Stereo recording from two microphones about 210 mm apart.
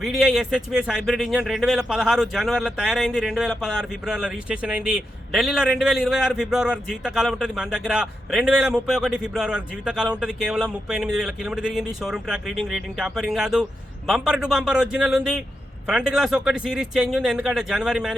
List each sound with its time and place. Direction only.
0.0 s a man's voice: centre (ahead or behind)